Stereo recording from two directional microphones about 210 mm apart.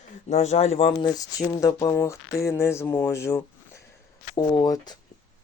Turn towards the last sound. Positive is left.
turn(degrees=20)  # may be behind; listen again after turning